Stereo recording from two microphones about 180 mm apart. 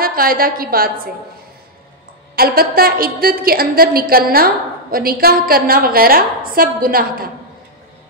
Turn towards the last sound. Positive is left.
turn(degrees=-55)  # may be behind; listen again after turning